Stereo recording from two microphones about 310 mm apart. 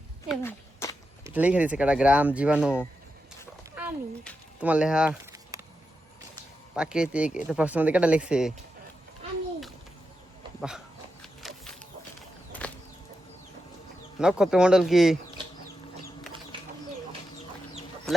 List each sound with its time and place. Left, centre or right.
0.3 s a sound: centre
1.2 s speech: centre
6.7 s speech: centre
11.2 s a sound: centre
14.2 s speech: centre
16.5 s bird: centre